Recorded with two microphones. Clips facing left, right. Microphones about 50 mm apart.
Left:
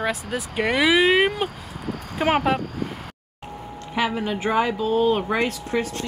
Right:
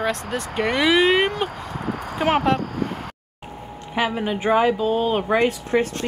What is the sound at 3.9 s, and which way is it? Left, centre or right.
Speech, centre.